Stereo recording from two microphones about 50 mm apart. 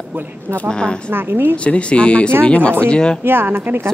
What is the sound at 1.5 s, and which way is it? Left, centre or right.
Speech, left.